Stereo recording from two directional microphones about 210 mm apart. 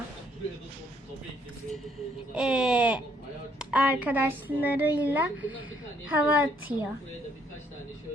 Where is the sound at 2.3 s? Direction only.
5° right (ahead or behind).